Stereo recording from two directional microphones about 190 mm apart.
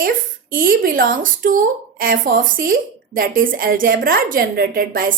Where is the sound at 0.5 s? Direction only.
45° right (ahead or behind).